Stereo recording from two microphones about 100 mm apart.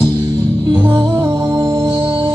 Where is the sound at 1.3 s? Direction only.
35° right (ahead or behind).